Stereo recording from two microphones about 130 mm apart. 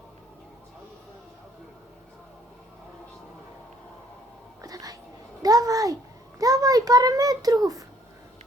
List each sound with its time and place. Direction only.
4.6 s whispering: 30° right (ahead or behind)
5.4 s a sound: 30° right (ahead or behind)
6.4 s a child's voice: 30° right (ahead or behind)